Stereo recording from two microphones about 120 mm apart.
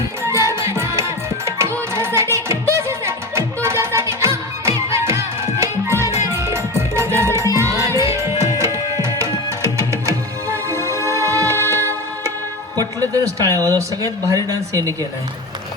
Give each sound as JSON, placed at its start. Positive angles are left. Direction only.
{"t": 0.2, "sound": "music", "side_deg": -25}
{"t": 6.3, "sound": "music", "side_deg": -25}
{"t": 12.7, "sound": "a sound", "side_deg": -30}
{"t": 14.3, "sound": "speech", "side_deg": -25}